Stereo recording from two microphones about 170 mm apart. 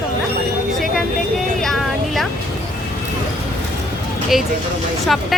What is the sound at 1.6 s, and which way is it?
Speech, centre (ahead or behind).